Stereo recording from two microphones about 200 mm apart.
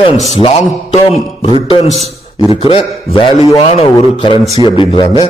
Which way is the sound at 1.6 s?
25° left (ahead or behind).